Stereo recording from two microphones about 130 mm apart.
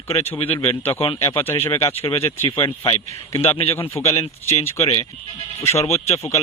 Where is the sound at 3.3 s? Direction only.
45° left (ahead or behind).